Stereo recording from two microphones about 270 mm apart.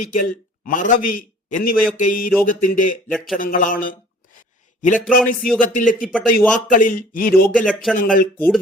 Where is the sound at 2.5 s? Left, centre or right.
Left.